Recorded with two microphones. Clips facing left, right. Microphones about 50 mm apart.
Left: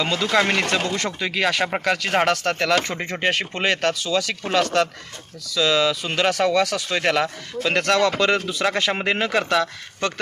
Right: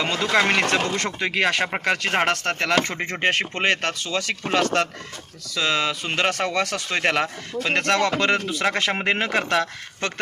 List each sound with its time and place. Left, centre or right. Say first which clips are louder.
0.0 s speech: even; right